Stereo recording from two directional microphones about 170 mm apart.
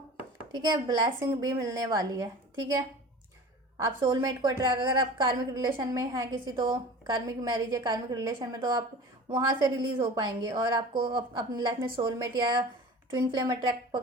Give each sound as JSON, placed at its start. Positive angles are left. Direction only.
{"t": 0.5, "sound": "a woman's voice", "side_deg": -25}